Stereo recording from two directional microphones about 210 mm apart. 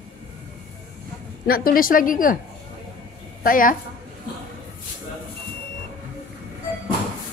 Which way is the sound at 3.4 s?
40° left (ahead or behind).